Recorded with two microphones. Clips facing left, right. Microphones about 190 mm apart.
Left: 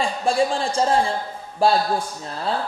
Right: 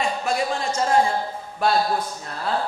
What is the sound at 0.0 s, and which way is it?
A man's voice, 30° left (ahead or behind).